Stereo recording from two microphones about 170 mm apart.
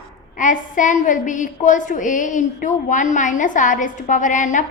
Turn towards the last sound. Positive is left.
turn(degrees=45)  # may be behind; listen again after turning